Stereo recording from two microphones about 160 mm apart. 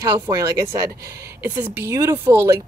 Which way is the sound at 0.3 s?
20° right (ahead or behind).